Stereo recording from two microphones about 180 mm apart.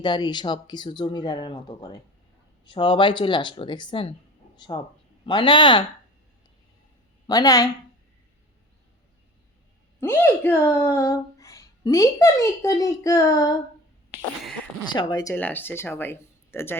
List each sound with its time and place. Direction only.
0.0 s speech: 25° left (ahead or behind)
7.3 s speech: 20° left (ahead or behind)
10.0 s a woman's voice: 10° left (ahead or behind)
14.9 s a woman's voice: 20° left (ahead or behind)